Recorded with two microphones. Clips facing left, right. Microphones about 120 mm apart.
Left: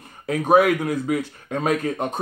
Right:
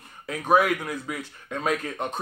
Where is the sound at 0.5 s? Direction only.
60° left (ahead or behind).